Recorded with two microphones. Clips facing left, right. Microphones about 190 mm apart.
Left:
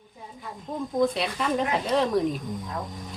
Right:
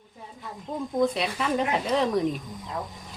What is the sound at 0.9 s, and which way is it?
A woman's voice, centre (ahead or behind).